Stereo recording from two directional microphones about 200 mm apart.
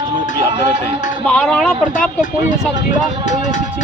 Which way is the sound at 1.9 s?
40° left (ahead or behind).